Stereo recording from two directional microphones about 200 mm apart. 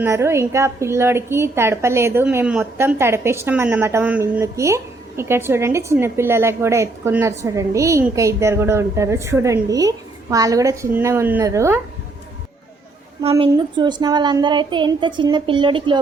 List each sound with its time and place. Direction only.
0.0 s a woman's voice: 15° right (ahead or behind)
13.5 s a woman's voice: 20° right (ahead or behind)